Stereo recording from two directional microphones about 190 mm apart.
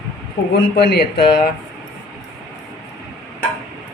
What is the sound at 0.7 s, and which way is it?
Speech, 60° left (ahead or behind).